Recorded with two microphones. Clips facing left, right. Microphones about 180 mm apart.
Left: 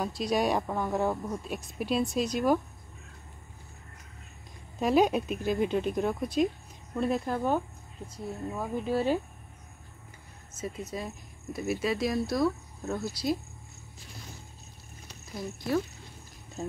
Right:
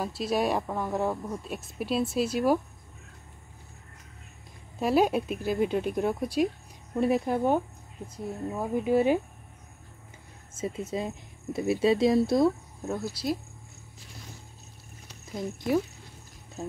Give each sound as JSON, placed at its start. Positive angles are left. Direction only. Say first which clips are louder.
{"t": 0.0, "sound": "speech", "louder": "even", "side_deg": -5}
{"t": 4.7, "sound": "speech", "louder": "even", "side_deg": -5}
{"t": 10.6, "sound": "speech", "louder": "right 4 dB", "side_deg": -25}
{"t": 12.8, "sound": "speech", "louder": "even", "side_deg": -5}